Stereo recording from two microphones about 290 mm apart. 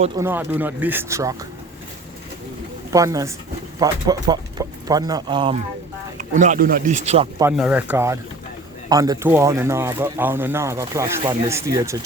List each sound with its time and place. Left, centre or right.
0.2 s speech: centre
2.9 s speech: centre
7.3 s speech: centre